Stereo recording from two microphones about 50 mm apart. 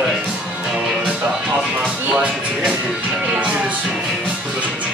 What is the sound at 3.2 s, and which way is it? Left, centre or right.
Music, right.